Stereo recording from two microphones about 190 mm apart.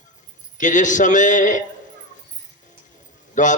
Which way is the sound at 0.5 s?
40° left (ahead or behind).